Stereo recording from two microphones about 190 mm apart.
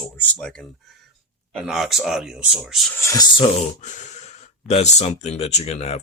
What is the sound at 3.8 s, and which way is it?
Speech, 40° left (ahead or behind).